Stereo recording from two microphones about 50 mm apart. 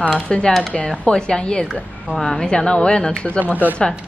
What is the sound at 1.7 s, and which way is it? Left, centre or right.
Speech, centre.